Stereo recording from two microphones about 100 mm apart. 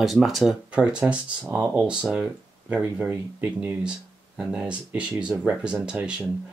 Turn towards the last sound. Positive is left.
turn(degrees=-10)  # may be behind; listen again after turning